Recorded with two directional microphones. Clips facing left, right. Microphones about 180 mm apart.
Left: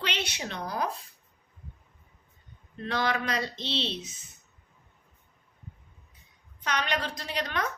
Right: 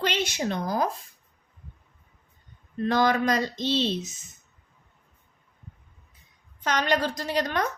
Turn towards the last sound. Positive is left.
turn(degrees=-45)  # may be behind; listen again after turning